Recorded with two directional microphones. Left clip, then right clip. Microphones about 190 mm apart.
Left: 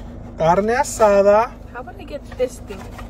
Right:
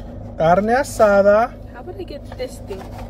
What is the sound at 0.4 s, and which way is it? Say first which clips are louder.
Speech: right 1 dB; 25° right (ahead or behind).